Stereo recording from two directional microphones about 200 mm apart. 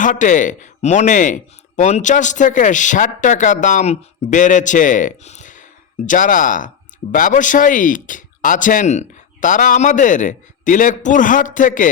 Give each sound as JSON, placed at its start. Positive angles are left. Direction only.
{"t": 0.0, "sound": "speech", "side_deg": 40}